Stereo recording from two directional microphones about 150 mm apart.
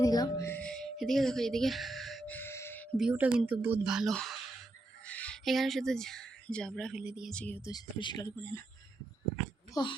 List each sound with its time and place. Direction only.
0.0 s speech: 25° left (ahead or behind); by 2.3 s centre (ahead or behind)
2.3 s music: 15° left (ahead or behind)
3.0 s speech: 5° right (ahead or behind)
7.3 s speech: 10° left (ahead or behind)
7.7 s speech: 30° left (ahead or behind)
9.7 s speech: 25° left (ahead or behind)